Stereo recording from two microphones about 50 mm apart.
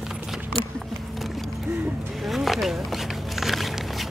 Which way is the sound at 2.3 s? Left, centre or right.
Centre.